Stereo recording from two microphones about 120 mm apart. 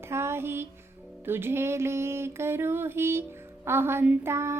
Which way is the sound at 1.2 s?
20° right (ahead or behind).